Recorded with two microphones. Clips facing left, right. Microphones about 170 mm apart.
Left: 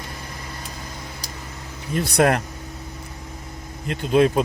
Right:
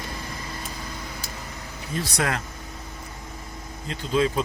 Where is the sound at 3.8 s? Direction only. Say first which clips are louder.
Left 6 dB; 60° left (ahead or behind).